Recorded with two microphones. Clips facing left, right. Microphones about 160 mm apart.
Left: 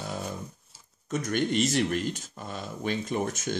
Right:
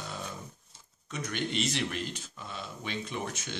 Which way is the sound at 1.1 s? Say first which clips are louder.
Left 7 dB; 45° left (ahead or behind).